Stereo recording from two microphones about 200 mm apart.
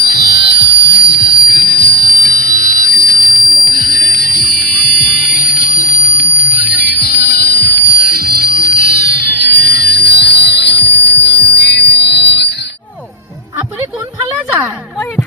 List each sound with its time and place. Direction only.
0.0 s music: 50° left (ahead or behind)
8.3 s music: 50° right (ahead or behind)
9.3 s music: 50° left (ahead or behind)
14.2 s a sound: 15° right (ahead or behind)